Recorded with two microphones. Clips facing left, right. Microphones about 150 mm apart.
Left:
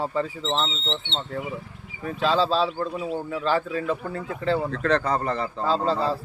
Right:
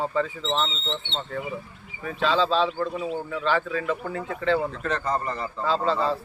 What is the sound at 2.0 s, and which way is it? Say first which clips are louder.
Speech: left 1 dB; 35° left (ahead or behind).